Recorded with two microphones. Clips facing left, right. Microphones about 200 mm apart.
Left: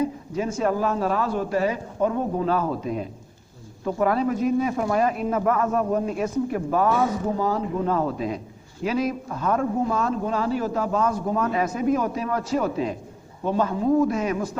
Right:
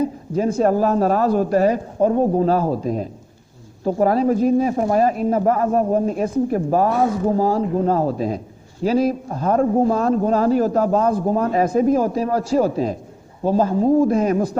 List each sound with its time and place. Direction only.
0.0 s speech: 35° right (ahead or behind)